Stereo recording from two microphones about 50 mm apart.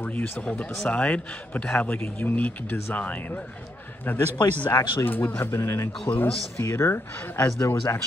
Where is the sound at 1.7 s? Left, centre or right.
Left.